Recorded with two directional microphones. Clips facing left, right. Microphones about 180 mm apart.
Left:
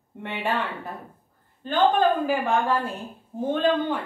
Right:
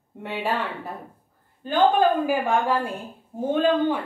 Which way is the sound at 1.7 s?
10° right (ahead or behind).